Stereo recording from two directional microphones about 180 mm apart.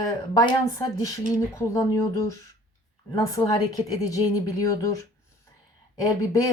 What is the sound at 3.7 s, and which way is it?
Speech, 20° left (ahead or behind).